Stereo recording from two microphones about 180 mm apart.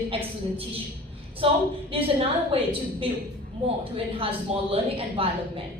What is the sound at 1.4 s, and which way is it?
A woman's voice, 30° right (ahead or behind).